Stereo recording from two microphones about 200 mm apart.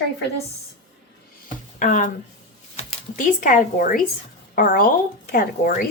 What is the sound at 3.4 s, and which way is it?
Speech, 40° left (ahead or behind).